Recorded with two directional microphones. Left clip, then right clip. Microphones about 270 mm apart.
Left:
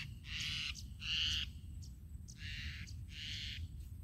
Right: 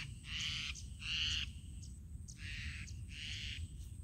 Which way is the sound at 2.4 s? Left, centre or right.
Left.